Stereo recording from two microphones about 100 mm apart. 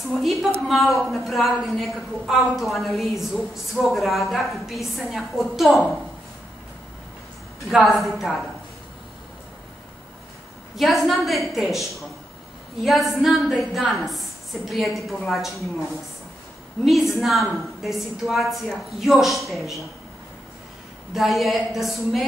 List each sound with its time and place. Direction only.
0.1 s a woman's voice: centre (ahead or behind)
7.7 s a woman's voice: centre (ahead or behind)
10.8 s a woman's voice: centre (ahead or behind)
16.8 s a woman's voice: centre (ahead or behind)
21.1 s a woman's voice: centre (ahead or behind)